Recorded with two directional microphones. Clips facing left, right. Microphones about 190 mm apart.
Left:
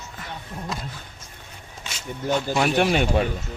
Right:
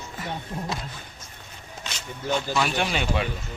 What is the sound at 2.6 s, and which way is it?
Speech, 50° left (ahead or behind).